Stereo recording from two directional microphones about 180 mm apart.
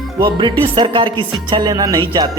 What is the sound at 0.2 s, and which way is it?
Speech, 25° right (ahead or behind).